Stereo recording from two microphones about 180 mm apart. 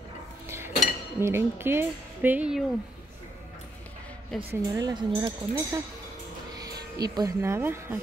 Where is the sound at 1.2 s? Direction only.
15° right (ahead or behind).